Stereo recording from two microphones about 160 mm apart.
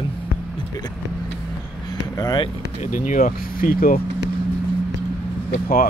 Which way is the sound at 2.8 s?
50° left (ahead or behind).